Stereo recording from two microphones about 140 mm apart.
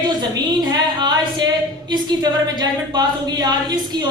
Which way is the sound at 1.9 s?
30° right (ahead or behind).